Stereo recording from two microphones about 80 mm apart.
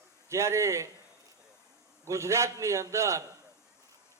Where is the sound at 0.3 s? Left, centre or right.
Right.